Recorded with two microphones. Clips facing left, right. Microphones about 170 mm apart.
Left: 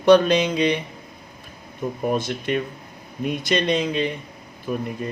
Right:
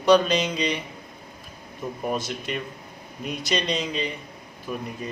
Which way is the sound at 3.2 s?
55° left (ahead or behind).